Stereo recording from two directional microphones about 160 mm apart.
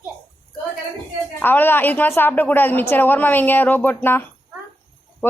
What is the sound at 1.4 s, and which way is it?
A woman's voice, 10° left (ahead or behind).